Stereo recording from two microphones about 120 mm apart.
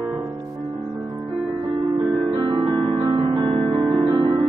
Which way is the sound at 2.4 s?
40° right (ahead or behind).